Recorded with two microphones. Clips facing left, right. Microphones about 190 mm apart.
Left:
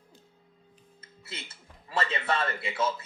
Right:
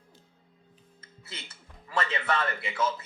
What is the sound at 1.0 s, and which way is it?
Speech, 25° left (ahead or behind).